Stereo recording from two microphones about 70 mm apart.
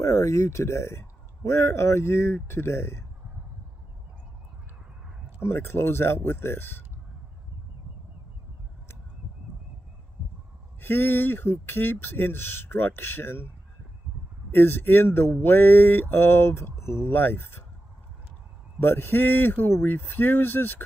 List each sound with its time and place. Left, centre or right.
0.0 s mantra: left
5.4 s mantra: left
10.8 s mantra: left
14.5 s mantra: left
18.8 s speech: left